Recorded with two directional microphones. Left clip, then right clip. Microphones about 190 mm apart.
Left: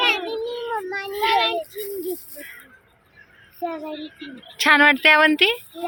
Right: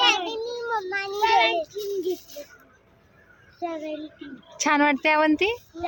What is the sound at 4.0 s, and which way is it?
Speech, 50° right (ahead or behind).